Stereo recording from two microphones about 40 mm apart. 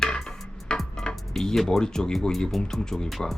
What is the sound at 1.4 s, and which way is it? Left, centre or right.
Speech, centre.